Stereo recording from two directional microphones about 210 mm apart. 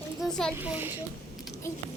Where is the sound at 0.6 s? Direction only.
10° right (ahead or behind).